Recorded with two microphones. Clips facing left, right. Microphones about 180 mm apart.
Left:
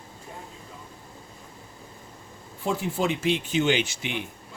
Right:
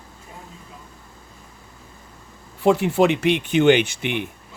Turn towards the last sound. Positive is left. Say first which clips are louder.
# right 6 dB
turn(degrees=-60)  # may be behind; listen again after turning